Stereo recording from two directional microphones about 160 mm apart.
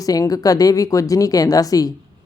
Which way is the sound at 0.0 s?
20° left (ahead or behind).